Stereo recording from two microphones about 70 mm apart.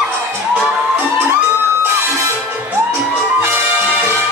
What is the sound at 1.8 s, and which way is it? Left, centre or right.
Music, right.